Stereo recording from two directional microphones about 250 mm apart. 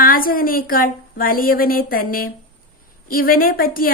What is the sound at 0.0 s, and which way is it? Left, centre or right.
A woman's voice, left.